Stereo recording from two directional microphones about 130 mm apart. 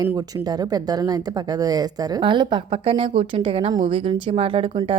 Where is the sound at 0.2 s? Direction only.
30° right (ahead or behind); by 3.7 s 45° right (ahead or behind).